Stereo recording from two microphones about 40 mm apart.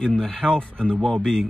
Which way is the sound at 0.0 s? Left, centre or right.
Centre.